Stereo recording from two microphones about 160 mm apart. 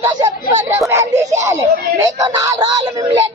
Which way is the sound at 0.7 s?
15° right (ahead or behind).